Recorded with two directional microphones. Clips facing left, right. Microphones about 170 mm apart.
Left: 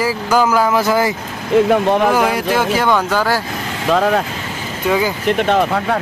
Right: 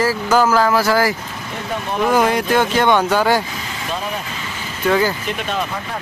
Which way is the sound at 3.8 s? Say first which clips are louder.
Left 12 dB; 85° left.